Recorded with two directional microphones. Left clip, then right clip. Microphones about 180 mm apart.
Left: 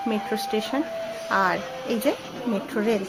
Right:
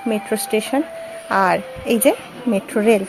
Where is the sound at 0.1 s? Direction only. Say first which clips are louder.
Right 8 dB; 30° right (ahead or behind).